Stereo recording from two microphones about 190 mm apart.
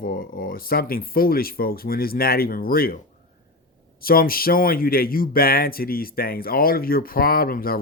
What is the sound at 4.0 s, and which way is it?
Speech, 50° left (ahead or behind).